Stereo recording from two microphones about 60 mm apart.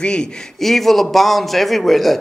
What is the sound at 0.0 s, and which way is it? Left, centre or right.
A man's voice, centre.